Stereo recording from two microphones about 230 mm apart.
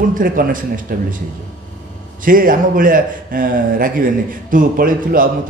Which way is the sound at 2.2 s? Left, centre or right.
Right.